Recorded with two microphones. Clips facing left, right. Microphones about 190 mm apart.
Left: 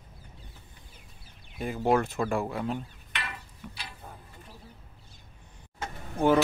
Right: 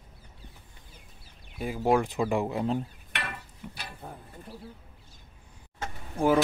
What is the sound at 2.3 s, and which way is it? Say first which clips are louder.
Speech: right 4 dB; 20° right (ahead or behind).